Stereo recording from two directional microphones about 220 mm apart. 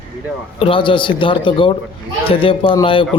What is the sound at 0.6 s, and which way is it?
Speech, 25° left (ahead or behind).